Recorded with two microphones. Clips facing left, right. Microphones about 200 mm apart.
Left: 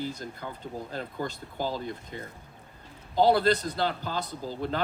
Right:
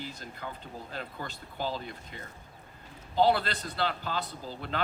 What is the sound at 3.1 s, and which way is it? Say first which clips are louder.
Speech: left 4 dB; 40° left (ahead or behind).